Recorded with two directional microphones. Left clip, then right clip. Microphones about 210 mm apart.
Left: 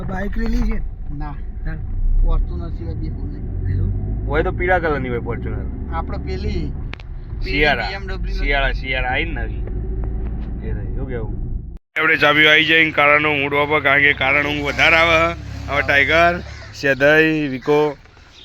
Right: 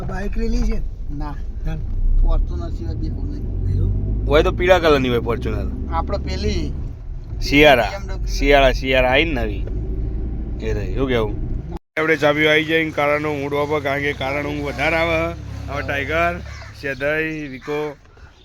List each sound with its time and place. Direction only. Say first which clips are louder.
0.2 s speech: left 3 dB; 20° left (ahead or behind)
2.2 s speech: right 1 dB; 50° right (ahead or behind)
4.3 s speech: right 4 dB; 25° right (ahead or behind)
5.9 s speech: right 3 dB; 50° right (ahead or behind)
10.6 s speech: right 11 dB; 55° right (ahead or behind)
11.9 s speech: left 3 dB; 15° right (ahead or behind)
15.3 s speech: left 6 dB; 15° left (ahead or behind)
16.1 s speech: left 5 dB; 40° left (ahead or behind)